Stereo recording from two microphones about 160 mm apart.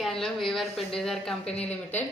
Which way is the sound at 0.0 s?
Centre (ahead or behind).